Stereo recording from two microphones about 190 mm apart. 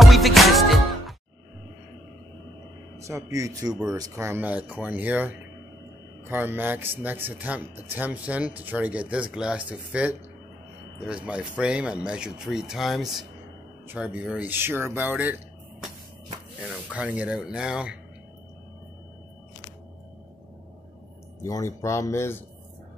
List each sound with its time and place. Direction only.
0.0 s music: centre (ahead or behind)
3.0 s speech: 15° right (ahead or behind)
11.2 s speech: 5° right (ahead or behind)
16.9 s speech: 5° right (ahead or behind)
21.4 s speech: 15° left (ahead or behind)